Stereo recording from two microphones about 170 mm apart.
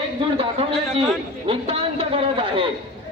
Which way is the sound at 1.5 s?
35° right (ahead or behind).